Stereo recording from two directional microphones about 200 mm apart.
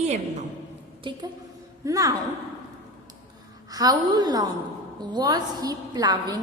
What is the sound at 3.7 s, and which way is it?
A woman's voice, 20° right (ahead or behind).